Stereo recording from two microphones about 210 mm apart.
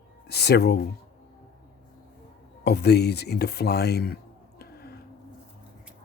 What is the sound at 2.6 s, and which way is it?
Speech, 50° left (ahead or behind).